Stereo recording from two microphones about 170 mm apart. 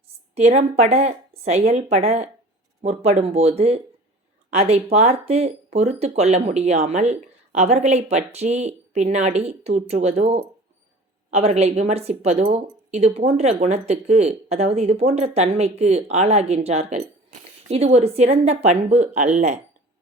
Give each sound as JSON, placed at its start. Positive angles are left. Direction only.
{"t": 0.3, "sound": "speech", "side_deg": -40}